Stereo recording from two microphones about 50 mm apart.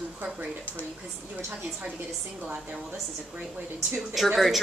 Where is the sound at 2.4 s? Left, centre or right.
Right.